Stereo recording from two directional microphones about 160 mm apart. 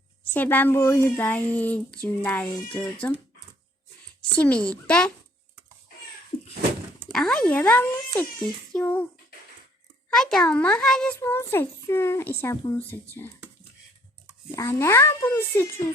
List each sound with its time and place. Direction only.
0.3 s speech: 10° left (ahead or behind)
4.4 s speech: 10° left (ahead or behind)
7.1 s speech: 5° left (ahead or behind)
10.1 s a child's voice: 5° left (ahead or behind)
11.2 s speech: 15° left (ahead or behind)
14.5 s speech: 15° left (ahead or behind)